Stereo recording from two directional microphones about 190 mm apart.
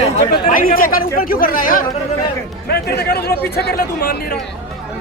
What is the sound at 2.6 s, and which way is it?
Speech, 55° left (ahead or behind).